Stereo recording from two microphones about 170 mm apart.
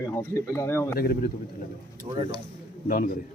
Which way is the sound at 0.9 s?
65° left (ahead or behind).